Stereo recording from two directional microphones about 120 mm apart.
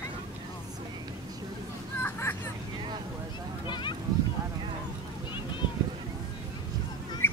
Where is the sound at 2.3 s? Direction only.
15° left (ahead or behind).